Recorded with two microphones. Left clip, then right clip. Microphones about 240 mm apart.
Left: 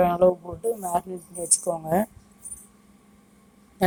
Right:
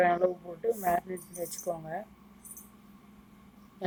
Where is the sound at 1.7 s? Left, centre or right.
Centre.